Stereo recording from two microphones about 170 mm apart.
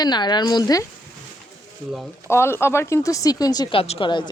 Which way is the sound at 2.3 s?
15° left (ahead or behind).